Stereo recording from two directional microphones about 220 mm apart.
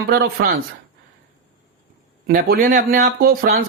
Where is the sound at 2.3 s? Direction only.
40° right (ahead or behind).